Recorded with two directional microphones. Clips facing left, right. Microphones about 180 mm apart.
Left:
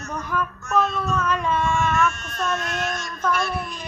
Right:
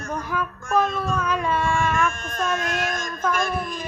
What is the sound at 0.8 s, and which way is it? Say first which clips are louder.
Speech: even; 50° right (ahead or behind).